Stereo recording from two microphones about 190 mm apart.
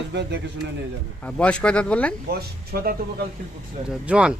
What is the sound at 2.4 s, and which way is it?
Speech, 55° right (ahead or behind).